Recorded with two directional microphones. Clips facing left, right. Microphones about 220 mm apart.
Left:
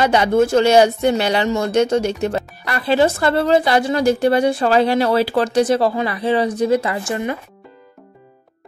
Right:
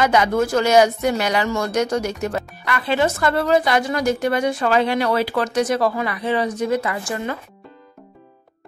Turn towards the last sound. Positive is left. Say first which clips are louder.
# left 3 dB
turn(degrees=20)  # may be behind; listen again after turning